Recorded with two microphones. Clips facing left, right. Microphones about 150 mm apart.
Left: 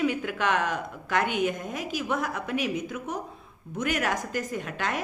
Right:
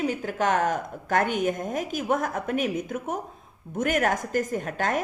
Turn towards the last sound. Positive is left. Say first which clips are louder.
# right 4 dB
turn(degrees=-45)  # may be behind; listen again after turning